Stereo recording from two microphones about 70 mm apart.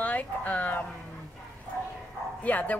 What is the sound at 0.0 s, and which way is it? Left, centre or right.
Speech, left.